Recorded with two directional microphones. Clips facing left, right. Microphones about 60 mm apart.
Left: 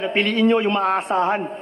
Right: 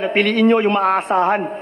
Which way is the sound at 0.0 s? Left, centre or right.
Right.